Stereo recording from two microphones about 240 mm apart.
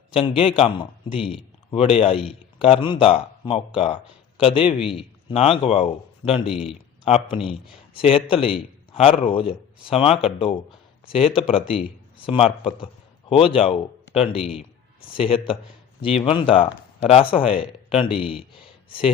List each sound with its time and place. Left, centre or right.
0.1 s a man's voice: left
2.1 s speech: centre
2.6 s a man's voice: left
6.5 s speech: centre
7.0 s a man's voice: left